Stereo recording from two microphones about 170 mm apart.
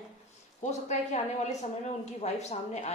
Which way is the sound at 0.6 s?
45° left (ahead or behind).